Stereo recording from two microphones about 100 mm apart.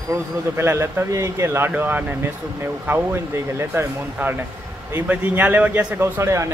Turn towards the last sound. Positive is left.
turn(degrees=-25)  # may be behind; listen again after turning